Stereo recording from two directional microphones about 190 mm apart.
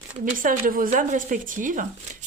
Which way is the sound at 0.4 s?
45° right (ahead or behind).